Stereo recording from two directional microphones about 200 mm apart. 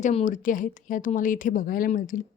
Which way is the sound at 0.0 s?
35° left (ahead or behind).